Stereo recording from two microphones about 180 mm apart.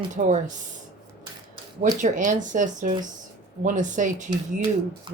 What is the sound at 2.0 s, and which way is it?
Speech, 45° right (ahead or behind).